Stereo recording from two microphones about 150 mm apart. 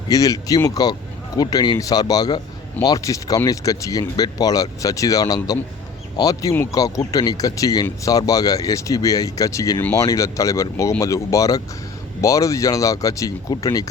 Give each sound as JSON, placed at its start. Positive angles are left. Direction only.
{"t": 0.1, "sound": "speech", "side_deg": 25}